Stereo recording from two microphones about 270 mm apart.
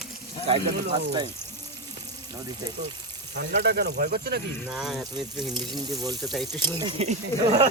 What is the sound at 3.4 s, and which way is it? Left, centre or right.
Speech, right.